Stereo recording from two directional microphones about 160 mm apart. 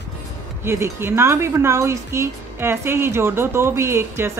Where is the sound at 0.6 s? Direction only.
15° right (ahead or behind).